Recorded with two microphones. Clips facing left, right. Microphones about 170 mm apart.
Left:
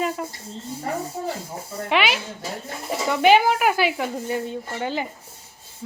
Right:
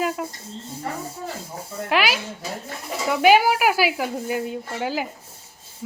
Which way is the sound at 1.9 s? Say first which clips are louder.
Even; 5° right (ahead or behind).